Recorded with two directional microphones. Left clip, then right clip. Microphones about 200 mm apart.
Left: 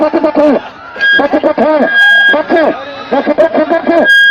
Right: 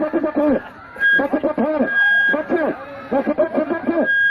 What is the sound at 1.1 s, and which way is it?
Speech, 45° right (ahead or behind).